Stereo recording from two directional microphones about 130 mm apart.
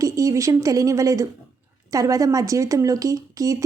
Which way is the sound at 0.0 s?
25° right (ahead or behind).